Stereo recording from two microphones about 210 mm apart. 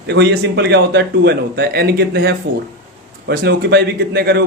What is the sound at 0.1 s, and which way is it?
Speech, 55° right (ahead or behind).